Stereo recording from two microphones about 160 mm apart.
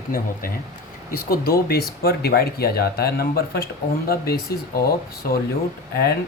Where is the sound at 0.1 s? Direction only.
65° left (ahead or behind).